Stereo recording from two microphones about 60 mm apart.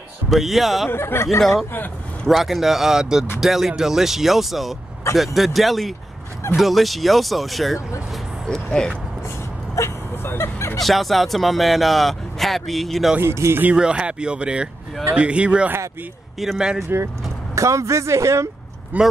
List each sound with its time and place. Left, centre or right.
0.3 s speech: centre
0.8 s speech: left
2.2 s speech: centre
8.8 s speech: centre
9.8 s vehicle: left
10.8 s speech: centre
13.2 s speech: right
13.7 s speech: centre
16.3 s speech: centre
17.6 s speech: right
18.9 s speech: right